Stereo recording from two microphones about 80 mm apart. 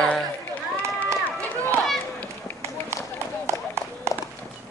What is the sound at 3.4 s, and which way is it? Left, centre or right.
Run, right.